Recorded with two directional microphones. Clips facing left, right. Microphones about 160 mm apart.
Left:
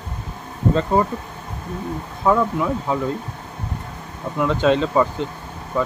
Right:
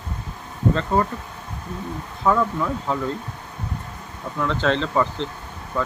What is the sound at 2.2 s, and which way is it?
Speech, 15° left (ahead or behind).